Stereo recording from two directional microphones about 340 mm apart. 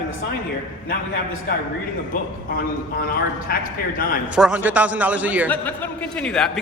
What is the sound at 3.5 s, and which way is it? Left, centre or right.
Speech, left.